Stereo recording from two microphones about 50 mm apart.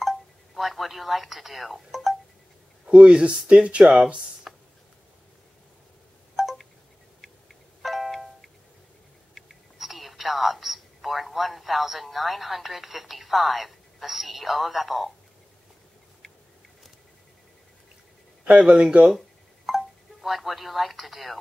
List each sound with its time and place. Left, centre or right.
0.0 s telephone dialing: centre
2.8 s speech: right
4.5 s a sound: centre
6.4 s wind chime: centre
7.8 s music: centre
9.3 s whispering: centre
18.4 s speech: centre
19.1 s telephone dialing: centre